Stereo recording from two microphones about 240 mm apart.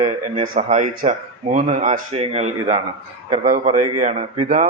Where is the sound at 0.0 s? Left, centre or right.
Right.